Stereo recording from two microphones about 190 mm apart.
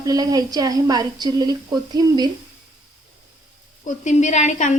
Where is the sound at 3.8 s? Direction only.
40° left (ahead or behind).